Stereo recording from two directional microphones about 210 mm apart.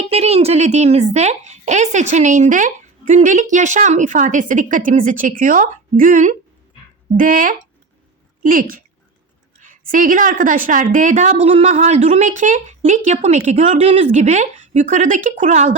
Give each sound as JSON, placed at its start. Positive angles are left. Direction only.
{"t": 0.0, "sound": "a woman's voice", "side_deg": -30}